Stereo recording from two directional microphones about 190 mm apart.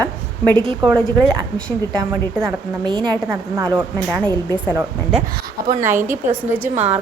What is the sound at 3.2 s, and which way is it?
Speech, 15° right (ahead or behind).